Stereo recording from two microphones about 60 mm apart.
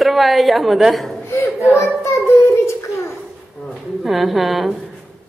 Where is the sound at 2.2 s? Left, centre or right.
Left.